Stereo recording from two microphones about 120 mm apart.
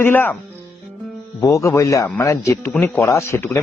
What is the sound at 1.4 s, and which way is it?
Speech, 25° left (ahead or behind).